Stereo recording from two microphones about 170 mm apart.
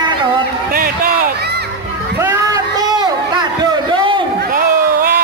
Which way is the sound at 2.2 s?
20° right (ahead or behind).